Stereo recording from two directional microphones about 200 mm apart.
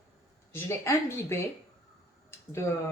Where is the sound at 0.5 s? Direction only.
15° left (ahead or behind).